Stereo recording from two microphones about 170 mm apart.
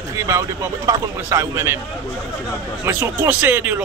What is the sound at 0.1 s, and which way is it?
A man's voice, 15° right (ahead or behind).